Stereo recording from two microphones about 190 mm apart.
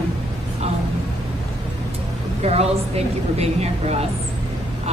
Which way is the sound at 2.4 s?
35° right (ahead or behind).